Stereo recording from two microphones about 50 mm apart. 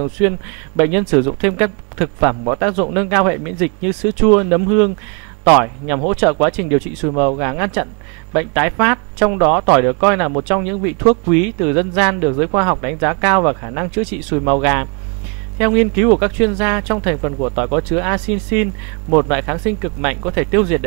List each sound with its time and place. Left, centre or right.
0.2 s speech: centre